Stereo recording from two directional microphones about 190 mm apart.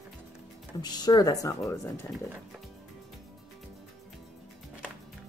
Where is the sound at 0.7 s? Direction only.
20° left (ahead or behind).